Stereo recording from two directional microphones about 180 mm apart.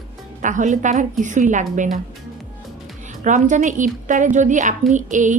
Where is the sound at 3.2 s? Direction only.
45° right (ahead or behind).